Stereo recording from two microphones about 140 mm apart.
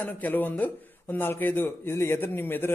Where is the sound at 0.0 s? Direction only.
15° left (ahead or behind).